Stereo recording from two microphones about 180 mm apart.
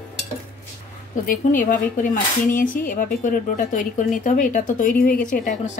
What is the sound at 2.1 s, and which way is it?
A woman's voice, 50° left (ahead or behind).